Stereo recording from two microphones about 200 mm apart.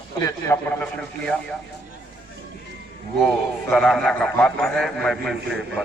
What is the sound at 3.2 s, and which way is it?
A man's voice, 5° left (ahead or behind).